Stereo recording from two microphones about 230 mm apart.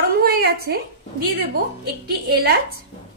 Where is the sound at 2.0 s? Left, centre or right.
Right.